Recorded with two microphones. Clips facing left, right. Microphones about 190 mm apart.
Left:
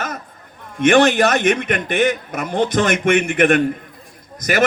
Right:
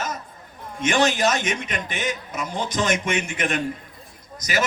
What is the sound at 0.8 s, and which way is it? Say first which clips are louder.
A man's voice: left 8 dB; 60° left (ahead or behind).